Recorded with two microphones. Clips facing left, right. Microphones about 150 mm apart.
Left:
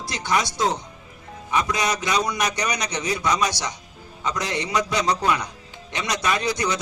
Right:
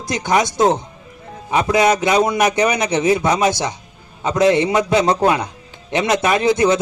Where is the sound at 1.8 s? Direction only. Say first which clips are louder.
Right 9 dB; 55° right (ahead or behind).